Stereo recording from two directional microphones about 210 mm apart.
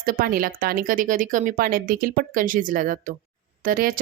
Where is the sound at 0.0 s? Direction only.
45° right (ahead or behind).